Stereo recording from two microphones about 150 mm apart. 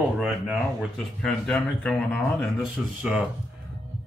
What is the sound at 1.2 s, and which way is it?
A man's voice, 5° left (ahead or behind).